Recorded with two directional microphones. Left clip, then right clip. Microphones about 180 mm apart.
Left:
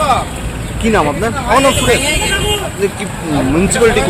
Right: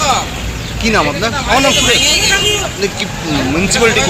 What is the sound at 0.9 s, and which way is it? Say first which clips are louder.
Speech: even; 30° left (ahead or behind).